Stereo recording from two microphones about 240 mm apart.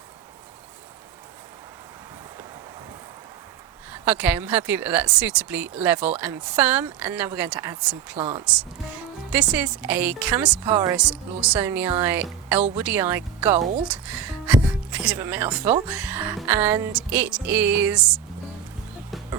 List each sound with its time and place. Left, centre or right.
4.0 s music: centre
8.2 s speech: right
9.3 s music: centre
10.9 s speech: centre
11.9 s music: centre
13.8 s speech: centre
15.0 s music: centre